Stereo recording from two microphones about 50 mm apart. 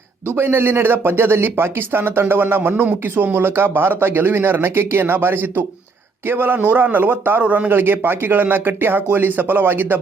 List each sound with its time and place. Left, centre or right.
0.3 s a man's voice: right
7.4 s a man's voice: right
7.7 s speech: right